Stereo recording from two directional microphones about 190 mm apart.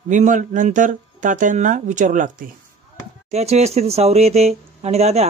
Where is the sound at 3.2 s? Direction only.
35° right (ahead or behind).